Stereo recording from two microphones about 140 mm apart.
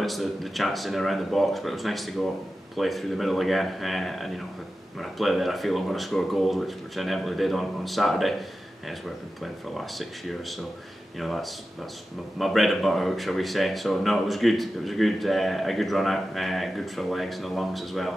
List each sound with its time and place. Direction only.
0.0 s speech: centre (ahead or behind)